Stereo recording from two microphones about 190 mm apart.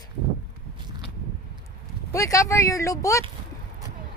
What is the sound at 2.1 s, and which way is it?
Speech, 15° left (ahead or behind).